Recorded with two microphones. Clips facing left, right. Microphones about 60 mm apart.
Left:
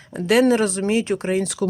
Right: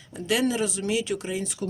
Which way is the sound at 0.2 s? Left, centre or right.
Left.